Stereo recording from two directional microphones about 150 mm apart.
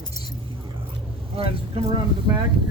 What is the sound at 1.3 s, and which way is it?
Speech, 40° right (ahead or behind).